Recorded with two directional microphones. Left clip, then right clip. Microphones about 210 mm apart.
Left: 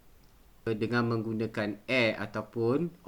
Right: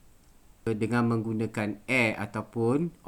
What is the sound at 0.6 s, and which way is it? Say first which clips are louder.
Speech: right 2 dB; 50° right (ahead or behind).